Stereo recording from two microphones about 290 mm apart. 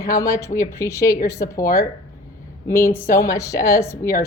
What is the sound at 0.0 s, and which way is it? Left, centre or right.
Speech, centre.